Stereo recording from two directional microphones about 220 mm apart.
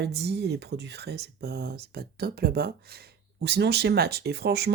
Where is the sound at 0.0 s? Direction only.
50° right (ahead or behind).